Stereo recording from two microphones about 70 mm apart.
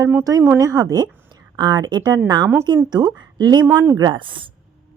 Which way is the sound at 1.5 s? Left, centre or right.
Right.